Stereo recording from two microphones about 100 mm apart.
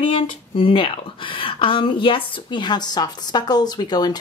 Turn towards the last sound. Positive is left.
turn(degrees=45)  # may be behind; listen again after turning